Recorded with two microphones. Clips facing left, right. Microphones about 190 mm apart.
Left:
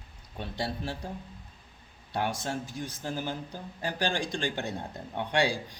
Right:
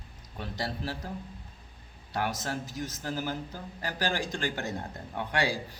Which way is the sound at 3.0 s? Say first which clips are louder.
Even; 20° left (ahead or behind).